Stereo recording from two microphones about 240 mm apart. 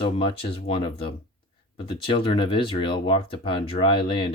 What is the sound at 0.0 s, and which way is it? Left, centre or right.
Speech, left.